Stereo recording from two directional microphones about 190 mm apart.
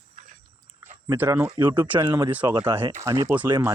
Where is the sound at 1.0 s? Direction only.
10° right (ahead or behind).